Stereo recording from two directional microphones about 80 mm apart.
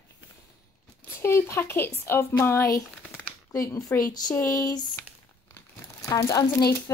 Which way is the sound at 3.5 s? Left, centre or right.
Left.